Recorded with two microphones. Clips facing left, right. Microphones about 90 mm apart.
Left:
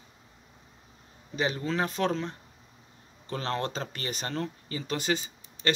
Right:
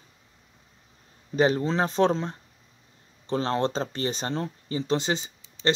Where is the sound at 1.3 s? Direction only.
35° right (ahead or behind).